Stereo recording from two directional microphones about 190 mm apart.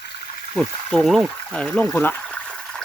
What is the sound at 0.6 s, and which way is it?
Speech, centre (ahead or behind).